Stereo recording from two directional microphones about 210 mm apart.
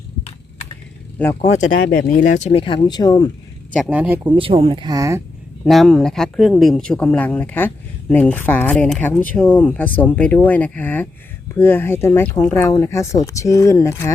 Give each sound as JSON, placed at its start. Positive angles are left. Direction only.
{"t": 1.4, "sound": "speech", "side_deg": 30}
{"t": 1.7, "sound": "speech", "side_deg": 60}
{"t": 2.0, "sound": "speech", "side_deg": 40}
{"t": 3.7, "sound": "speech", "side_deg": -5}
{"t": 4.2, "sound": "speech", "side_deg": -25}
{"t": 5.6, "sound": "speech", "side_deg": 0}